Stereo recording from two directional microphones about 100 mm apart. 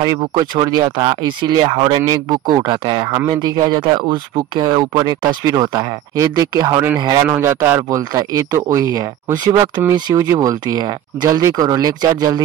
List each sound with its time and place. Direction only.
0.0 s speech: 40° right (ahead or behind)
3.3 s speech: 40° right (ahead or behind)
7.2 s speech: 25° right (ahead or behind)
8.1 s speech: 35° right (ahead or behind)
10.1 s speech: 30° right (ahead or behind)